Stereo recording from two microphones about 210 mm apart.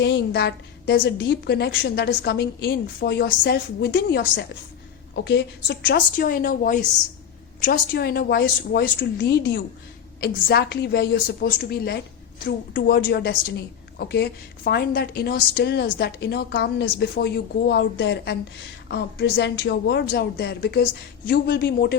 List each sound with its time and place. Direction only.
0.0 s a woman's voice: 55° left (ahead or behind)